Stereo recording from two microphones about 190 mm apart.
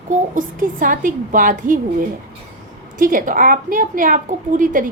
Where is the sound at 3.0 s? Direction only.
45° right (ahead or behind).